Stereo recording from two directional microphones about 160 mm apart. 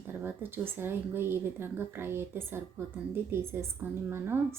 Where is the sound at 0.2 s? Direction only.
15° right (ahead or behind).